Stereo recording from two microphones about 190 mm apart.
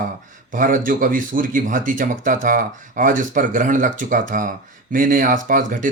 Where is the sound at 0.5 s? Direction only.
45° right (ahead or behind).